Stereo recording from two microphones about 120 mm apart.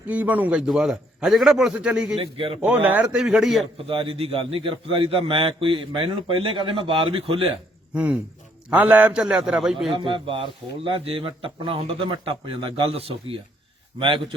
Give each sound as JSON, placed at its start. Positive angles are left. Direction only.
{"t": 0.1, "sound": "a man's voice", "side_deg": -15}
{"t": 2.1, "sound": "a man's voice", "side_deg": -50}
{"t": 2.6, "sound": "a man's voice", "side_deg": -15}
{"t": 3.8, "sound": "a man's voice", "side_deg": -50}
{"t": 7.9, "sound": "a man's voice", "side_deg": -10}
{"t": 9.9, "sound": "a man's voice", "side_deg": -45}